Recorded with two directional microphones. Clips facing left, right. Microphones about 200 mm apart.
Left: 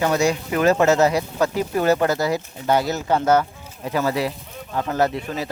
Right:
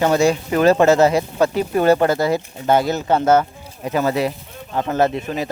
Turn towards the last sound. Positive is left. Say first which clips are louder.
# right 3 dB
turn(degrees=-20)  # may be behind; listen again after turning